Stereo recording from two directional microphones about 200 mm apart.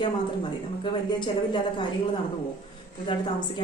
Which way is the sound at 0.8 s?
25° left (ahead or behind).